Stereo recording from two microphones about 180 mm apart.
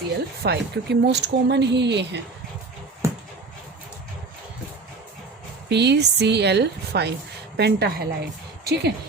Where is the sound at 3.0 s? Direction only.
15° right (ahead or behind).